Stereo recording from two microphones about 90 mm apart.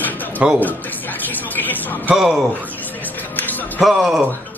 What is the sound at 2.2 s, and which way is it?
Chicken, 25° right (ahead or behind).